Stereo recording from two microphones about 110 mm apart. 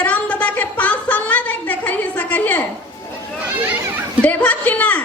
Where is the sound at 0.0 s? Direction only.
15° left (ahead or behind).